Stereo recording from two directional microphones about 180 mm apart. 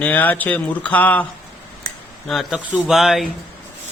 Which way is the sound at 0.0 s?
10° left (ahead or behind).